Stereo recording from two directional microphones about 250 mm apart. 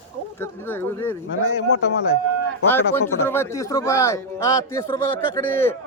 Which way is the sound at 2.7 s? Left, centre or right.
Centre.